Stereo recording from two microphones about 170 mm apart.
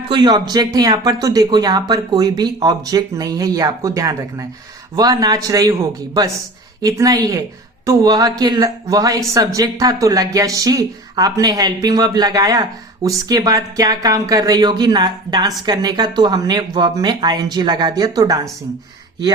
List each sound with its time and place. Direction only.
0.1 s speech: 25° right (ahead or behind)